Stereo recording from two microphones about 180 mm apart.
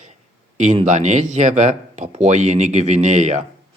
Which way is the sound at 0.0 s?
40° right (ahead or behind).